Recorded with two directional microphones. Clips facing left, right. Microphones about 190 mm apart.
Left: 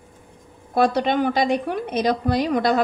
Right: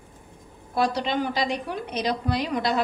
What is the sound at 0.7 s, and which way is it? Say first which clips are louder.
A woman's voice: left 5 dB; 55° left (ahead or behind).